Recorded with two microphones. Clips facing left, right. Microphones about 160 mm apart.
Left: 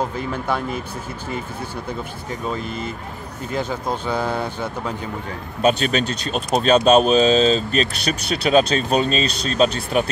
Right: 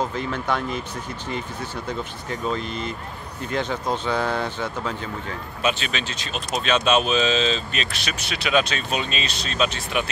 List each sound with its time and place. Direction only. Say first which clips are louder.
0.3 s speech: left 2 dB; 10° left (ahead or behind)
2.4 s speech: even; 5° left (ahead or behind)
5.6 s speech: left 8 dB; 40° left (ahead or behind)